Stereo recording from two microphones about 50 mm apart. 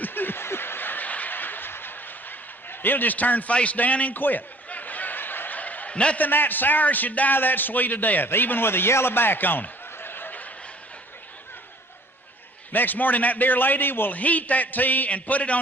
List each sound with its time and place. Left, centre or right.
0.0 s snicker: left
6.1 s a man's voice: left
12.7 s a man's voice: left
14.2 s a man's voice: left